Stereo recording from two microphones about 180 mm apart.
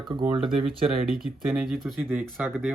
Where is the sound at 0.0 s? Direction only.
25° right (ahead or behind).